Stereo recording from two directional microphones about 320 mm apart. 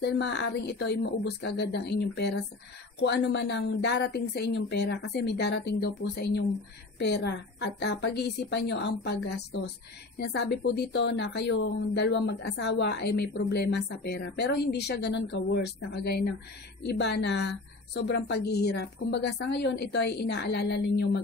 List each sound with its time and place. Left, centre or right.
0.0 s speech: left